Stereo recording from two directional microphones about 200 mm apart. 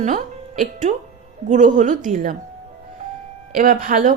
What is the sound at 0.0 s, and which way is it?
Speech, 40° right (ahead or behind).